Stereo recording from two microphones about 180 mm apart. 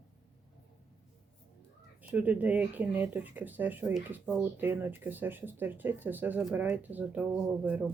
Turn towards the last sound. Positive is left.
turn(degrees=-5)  # may be behind; listen again after turning